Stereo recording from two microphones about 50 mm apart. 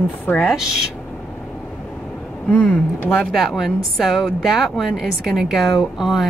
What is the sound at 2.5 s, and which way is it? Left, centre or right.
Speech, left.